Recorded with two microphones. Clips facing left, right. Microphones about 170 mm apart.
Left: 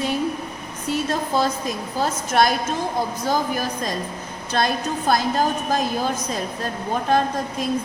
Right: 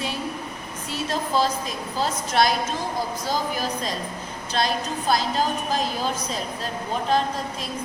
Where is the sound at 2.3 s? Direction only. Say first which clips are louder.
Left 2 dB; 50° left (ahead or behind).